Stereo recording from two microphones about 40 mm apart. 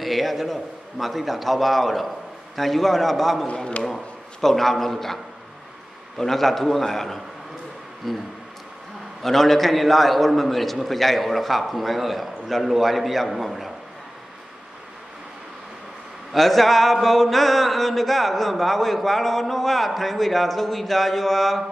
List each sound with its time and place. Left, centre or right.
0.0 s a man's voice: centre
3.4 s a man's voice: left
3.8 s a man's voice: centre
16.3 s a man's voice: centre